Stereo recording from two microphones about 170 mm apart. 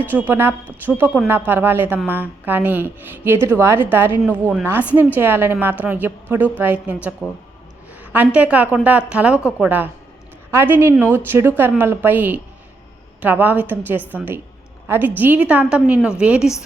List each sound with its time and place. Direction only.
0.1 s a woman's voice: 10° right (ahead or behind)
8.1 s a woman's voice: 10° right (ahead or behind)